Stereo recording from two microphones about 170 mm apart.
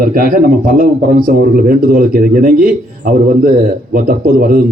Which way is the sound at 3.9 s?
55° right (ahead or behind).